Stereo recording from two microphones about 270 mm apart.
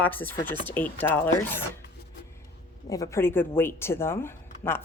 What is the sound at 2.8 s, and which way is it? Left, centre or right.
A woman's voice, centre.